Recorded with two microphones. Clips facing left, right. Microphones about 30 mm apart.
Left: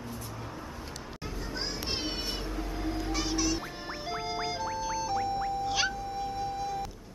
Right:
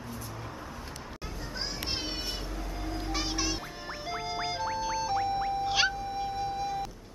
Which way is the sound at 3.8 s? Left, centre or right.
Centre.